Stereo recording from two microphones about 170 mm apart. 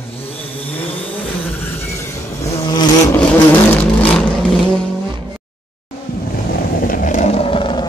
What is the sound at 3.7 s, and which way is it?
Vehicle, 5° left (ahead or behind).